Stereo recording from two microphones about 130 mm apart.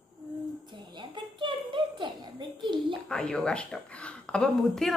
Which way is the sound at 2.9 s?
5° left (ahead or behind).